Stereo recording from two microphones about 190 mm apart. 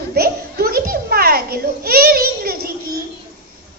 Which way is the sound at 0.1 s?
55° right (ahead or behind).